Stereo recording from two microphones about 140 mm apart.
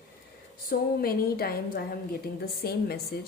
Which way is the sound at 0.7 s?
90° left.